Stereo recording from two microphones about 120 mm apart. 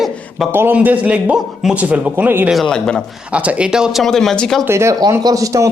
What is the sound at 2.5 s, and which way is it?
Speech, centre (ahead or behind).